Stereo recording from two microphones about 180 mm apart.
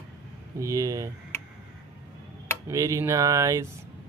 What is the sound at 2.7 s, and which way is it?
Speech, 15° right (ahead or behind).